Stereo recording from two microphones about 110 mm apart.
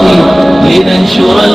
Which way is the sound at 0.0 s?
Centre (ahead or behind).